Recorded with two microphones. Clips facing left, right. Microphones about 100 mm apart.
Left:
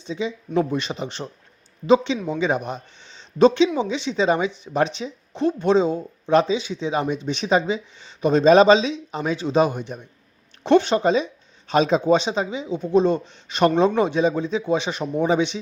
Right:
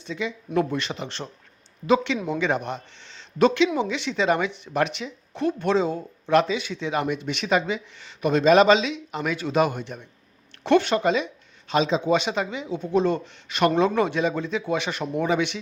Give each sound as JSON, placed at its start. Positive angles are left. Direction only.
{"t": 0.0, "sound": "speech", "side_deg": 20}
{"t": 2.1, "sound": "speech", "side_deg": -10}
{"t": 2.4, "sound": "speech", "side_deg": 15}
{"t": 11.7, "sound": "a man's voice", "side_deg": 45}
{"t": 12.1, "sound": "speech", "side_deg": 25}